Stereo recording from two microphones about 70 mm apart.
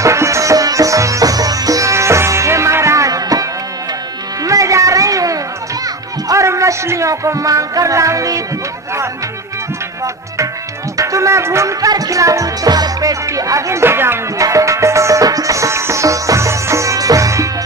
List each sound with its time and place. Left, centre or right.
0.0 s music: right
6.2 s speech: right
11.0 s music: right
11.9 s speech: right
14.4 s music: right